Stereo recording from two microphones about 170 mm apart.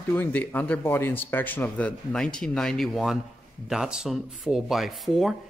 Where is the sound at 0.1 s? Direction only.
10° left (ahead or behind).